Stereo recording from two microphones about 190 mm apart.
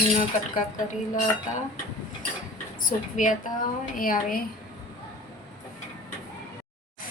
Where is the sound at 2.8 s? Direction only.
45° left (ahead or behind).